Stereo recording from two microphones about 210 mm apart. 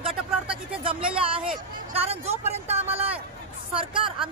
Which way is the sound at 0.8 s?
25° right (ahead or behind).